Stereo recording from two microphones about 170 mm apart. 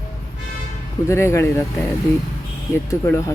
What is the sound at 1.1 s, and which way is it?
Speech, 15° left (ahead or behind).